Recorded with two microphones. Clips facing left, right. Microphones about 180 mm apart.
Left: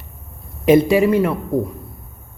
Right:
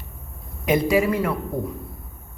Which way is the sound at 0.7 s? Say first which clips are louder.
Left 7 dB; 25° left (ahead or behind).